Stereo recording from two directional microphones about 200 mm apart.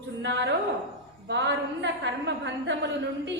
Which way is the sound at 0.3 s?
60° right (ahead or behind).